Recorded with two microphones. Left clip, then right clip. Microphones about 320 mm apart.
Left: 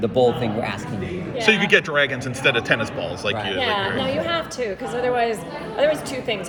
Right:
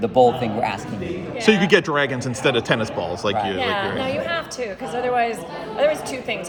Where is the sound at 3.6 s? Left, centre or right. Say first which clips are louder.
Left 1 dB; centre.